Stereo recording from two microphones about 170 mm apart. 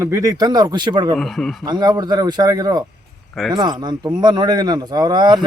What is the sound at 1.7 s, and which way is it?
Speech, 25° right (ahead or behind).